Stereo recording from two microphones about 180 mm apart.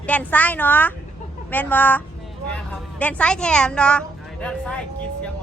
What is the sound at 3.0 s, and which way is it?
A woman's voice, 5° left (ahead or behind).